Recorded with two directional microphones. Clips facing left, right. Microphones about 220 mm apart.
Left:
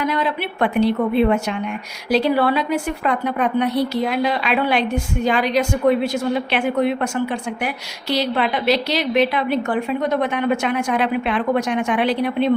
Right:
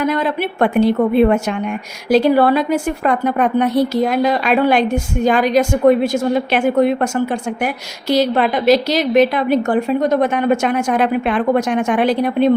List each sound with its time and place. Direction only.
0.0 s a woman's voice: 50° right (ahead or behind)